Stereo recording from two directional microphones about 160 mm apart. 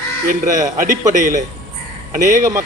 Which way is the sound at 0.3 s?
55° right (ahead or behind).